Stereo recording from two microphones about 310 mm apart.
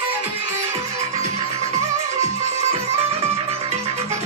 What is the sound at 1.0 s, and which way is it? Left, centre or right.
Music, right.